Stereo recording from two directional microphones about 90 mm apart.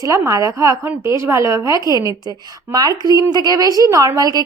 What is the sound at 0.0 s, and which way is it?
A woman's voice, 35° right (ahead or behind).